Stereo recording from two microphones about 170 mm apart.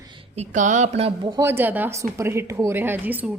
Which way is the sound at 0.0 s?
30° right (ahead or behind).